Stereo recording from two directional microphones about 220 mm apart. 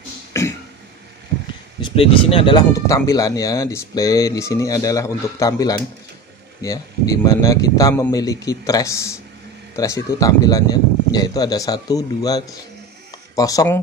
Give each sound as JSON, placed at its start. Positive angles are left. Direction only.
{"t": 0.3, "sound": "cough", "side_deg": 15}
{"t": 1.8, "sound": "speech", "side_deg": 25}